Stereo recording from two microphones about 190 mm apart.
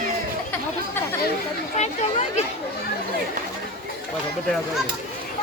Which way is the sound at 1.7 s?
35° left (ahead or behind).